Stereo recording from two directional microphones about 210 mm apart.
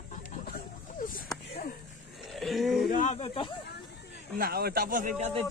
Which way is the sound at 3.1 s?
25° left (ahead or behind).